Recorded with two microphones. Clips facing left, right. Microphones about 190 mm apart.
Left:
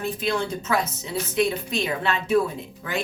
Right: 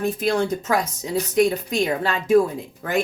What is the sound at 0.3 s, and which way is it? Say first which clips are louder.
Speech: right 3 dB; 45° right (ahead or behind).